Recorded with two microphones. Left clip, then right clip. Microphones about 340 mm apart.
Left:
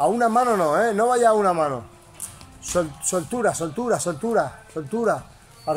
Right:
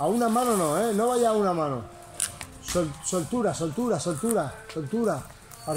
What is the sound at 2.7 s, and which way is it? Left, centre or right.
Speech, left.